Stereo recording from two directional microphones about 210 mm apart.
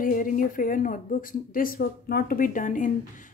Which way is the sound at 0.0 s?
40° left (ahead or behind).